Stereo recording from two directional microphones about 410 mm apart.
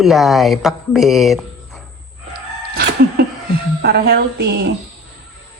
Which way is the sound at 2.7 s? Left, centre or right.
Right.